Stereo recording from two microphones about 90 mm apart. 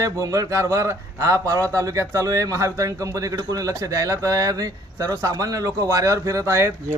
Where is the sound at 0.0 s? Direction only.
35° right (ahead or behind).